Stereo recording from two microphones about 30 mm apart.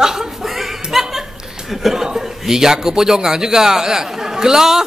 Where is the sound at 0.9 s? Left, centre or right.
Centre.